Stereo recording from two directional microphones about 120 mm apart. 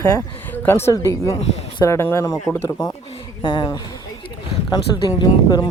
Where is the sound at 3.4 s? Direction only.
45° left (ahead or behind).